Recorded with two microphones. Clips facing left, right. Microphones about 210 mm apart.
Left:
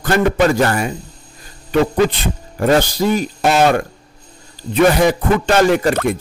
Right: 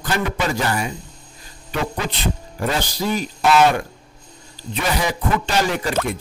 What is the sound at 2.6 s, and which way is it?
A man's voice, 55° left (ahead or behind).